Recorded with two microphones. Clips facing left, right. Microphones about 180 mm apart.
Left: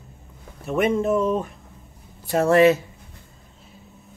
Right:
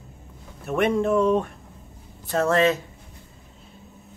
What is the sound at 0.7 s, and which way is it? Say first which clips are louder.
Speech: left 1 dB; 5° left (ahead or behind).